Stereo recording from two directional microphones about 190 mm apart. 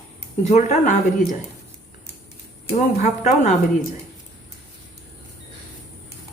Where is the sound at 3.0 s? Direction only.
40° left (ahead or behind).